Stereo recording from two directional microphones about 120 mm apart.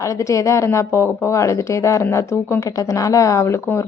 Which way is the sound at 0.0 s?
25° left (ahead or behind).